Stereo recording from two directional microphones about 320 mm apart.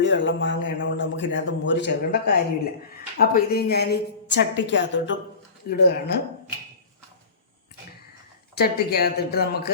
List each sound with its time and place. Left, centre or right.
0.0 s a man's voice: left
8.5 s speech: left